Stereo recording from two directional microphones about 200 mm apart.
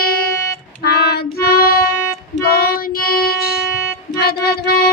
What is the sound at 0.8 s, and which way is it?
Child singing, 50° left (ahead or behind).